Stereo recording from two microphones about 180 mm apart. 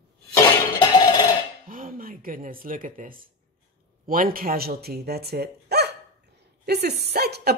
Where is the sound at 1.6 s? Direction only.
50° right (ahead or behind).